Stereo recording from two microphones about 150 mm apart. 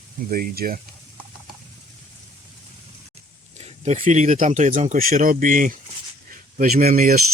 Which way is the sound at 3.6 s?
45° right (ahead or behind).